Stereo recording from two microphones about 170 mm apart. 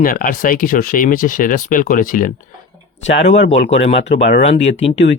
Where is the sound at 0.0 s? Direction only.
55° left (ahead or behind).